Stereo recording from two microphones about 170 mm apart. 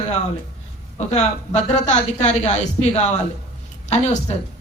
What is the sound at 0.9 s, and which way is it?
A woman's voice, 40° left (ahead or behind).